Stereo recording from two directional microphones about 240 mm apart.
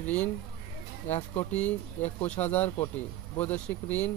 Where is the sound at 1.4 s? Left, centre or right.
Centre.